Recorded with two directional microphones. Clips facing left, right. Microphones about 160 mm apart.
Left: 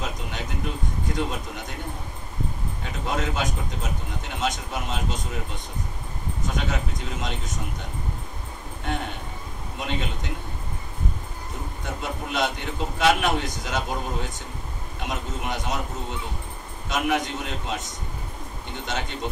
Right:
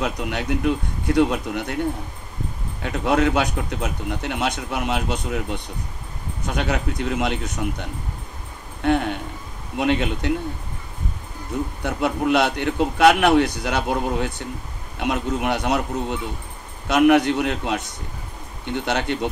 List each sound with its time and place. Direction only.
0.0 s a man's voice: 65° right (ahead or behind)
2.8 s a man's voice: 65° right (ahead or behind)
8.8 s a man's voice: 60° right (ahead or behind)
11.8 s a man's voice: 65° right (ahead or behind)